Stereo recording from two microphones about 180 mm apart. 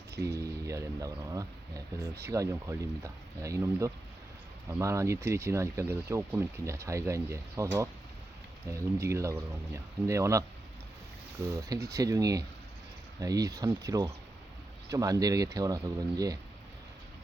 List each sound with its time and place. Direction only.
0.2 s speech: 20° right (ahead or behind)
11.4 s speech: 20° right (ahead or behind)